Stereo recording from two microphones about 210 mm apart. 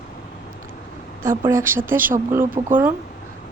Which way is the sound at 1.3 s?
10° right (ahead or behind).